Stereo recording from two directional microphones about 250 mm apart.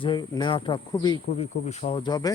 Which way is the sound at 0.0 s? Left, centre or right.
Centre.